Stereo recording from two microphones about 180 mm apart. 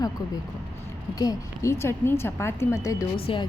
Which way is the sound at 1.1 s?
20° left (ahead or behind).